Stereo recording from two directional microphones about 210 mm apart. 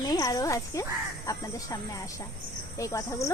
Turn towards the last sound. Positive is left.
turn(degrees=15)  # may be behind; listen again after turning